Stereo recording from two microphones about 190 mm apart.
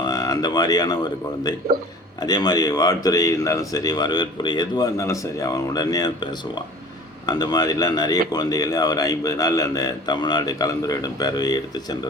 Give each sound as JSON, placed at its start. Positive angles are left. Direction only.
{"t": 0.0, "sound": "speech", "side_deg": 20}
{"t": 7.3, "sound": "speech", "side_deg": 20}